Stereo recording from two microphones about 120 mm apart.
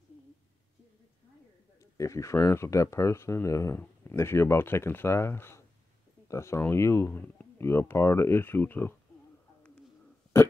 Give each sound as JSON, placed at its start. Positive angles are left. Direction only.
{"t": 2.0, "sound": "speech", "side_deg": 25}
{"t": 3.8, "sound": "a sound", "side_deg": 10}
{"t": 4.2, "sound": "speech", "side_deg": 20}